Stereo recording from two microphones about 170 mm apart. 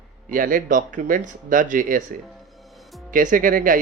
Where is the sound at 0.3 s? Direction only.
50° right (ahead or behind).